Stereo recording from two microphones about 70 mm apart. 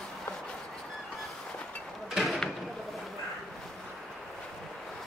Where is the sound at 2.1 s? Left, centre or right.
Centre.